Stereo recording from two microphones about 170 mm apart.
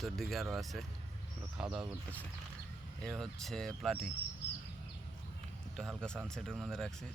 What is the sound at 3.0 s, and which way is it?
Speech, centre (ahead or behind).